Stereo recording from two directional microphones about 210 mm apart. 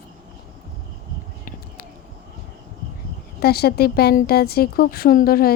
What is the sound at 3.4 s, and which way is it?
Speech, 50° left (ahead or behind).